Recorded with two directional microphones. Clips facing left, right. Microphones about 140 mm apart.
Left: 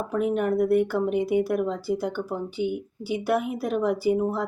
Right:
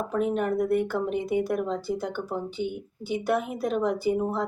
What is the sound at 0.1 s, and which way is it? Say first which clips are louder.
A woman's voice: left 3 dB; 5° left (ahead or behind).